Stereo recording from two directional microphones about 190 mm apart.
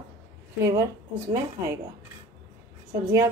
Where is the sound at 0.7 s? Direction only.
15° right (ahead or behind).